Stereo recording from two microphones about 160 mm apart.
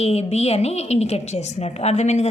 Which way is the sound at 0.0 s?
40° left (ahead or behind).